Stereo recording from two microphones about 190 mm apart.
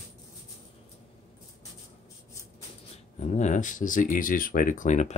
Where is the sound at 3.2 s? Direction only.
35° left (ahead or behind).